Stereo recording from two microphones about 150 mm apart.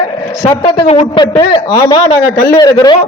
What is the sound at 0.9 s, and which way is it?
Speech, 45° left (ahead or behind).